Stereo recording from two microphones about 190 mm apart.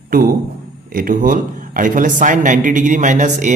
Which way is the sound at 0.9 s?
45° right (ahead or behind).